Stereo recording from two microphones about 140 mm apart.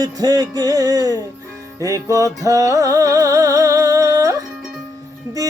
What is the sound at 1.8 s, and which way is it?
Music, 25° right (ahead or behind).